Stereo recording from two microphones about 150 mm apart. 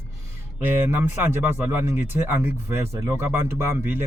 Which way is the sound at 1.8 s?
15° right (ahead or behind).